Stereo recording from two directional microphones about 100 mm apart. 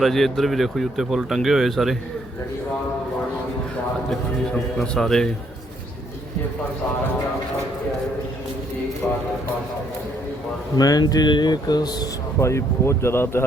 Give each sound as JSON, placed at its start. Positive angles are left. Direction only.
{"t": 0.0, "sound": "speech", "side_deg": 0}
{"t": 4.1, "sound": "speech", "side_deg": 5}
{"t": 9.0, "sound": "speech", "side_deg": 25}
{"t": 10.8, "sound": "speech", "side_deg": 40}
{"t": 12.4, "sound": "speech", "side_deg": 30}